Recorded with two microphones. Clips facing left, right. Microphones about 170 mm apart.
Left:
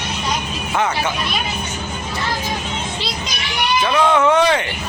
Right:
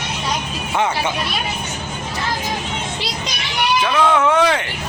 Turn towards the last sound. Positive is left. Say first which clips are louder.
# left 1 dB
turn(degrees=-5)  # may be behind; listen again after turning